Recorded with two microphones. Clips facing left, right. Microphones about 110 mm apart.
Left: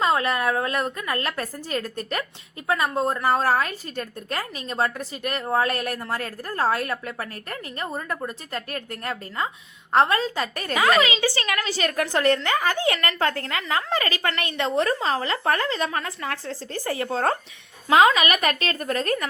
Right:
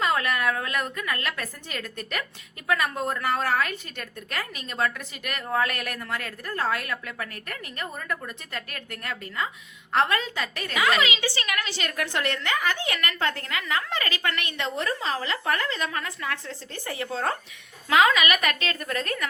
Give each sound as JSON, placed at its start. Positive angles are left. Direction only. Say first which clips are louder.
{"t": 0.0, "sound": "a woman's voice", "louder": "left 3 dB", "side_deg": 30}
{"t": 17.8, "sound": "a woman's voice", "louder": "left 3 dB", "side_deg": 30}